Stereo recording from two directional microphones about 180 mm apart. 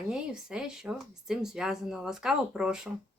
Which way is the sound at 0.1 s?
5° right (ahead or behind).